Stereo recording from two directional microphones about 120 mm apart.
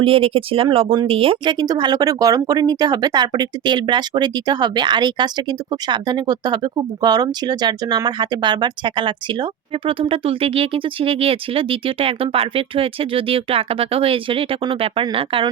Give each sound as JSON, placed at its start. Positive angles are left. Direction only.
{"t": 0.0, "sound": "speech", "side_deg": -50}